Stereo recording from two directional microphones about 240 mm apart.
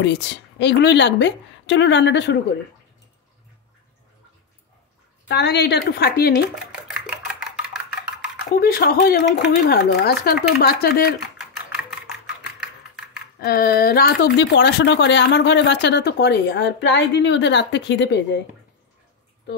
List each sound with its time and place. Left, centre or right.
0.0 s speech: left
5.3 s speech: left
6.5 s dishes: centre
8.5 s speech: left
13.4 s speech: left